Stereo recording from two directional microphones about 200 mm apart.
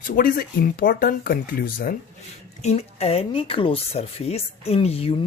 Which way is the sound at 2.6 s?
30° left (ahead or behind).